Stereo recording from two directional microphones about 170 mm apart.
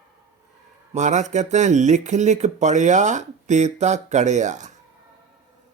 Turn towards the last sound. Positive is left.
turn(degrees=-45)  # may be behind; listen again after turning